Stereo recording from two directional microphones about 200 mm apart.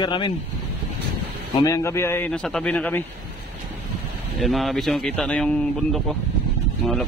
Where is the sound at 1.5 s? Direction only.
15° left (ahead or behind).